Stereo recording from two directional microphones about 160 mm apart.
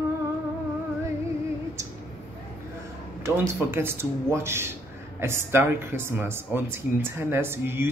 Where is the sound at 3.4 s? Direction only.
15° right (ahead or behind).